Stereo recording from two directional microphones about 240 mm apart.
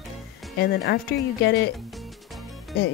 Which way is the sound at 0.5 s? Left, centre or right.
Left.